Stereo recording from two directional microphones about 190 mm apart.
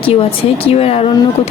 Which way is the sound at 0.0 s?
30° left (ahead or behind).